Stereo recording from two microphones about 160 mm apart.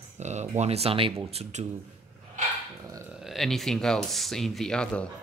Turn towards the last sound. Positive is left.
turn(degrees=5)  # may be behind; listen again after turning